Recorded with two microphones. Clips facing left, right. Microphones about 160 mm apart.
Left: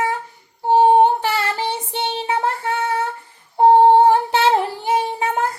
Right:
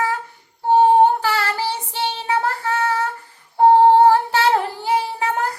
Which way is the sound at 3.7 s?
20° left (ahead or behind).